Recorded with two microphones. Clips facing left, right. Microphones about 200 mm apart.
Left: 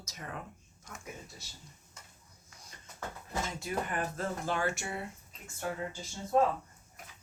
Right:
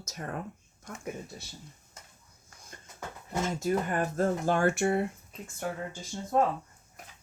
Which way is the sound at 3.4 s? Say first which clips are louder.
Right 10 dB; 45° right (ahead or behind).